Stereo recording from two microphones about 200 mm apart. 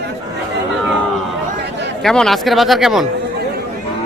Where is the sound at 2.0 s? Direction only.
Centre (ahead or behind).